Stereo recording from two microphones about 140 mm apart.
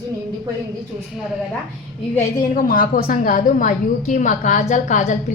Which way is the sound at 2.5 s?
90° left.